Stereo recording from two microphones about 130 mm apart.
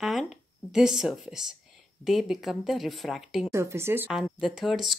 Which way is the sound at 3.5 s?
20° right (ahead or behind).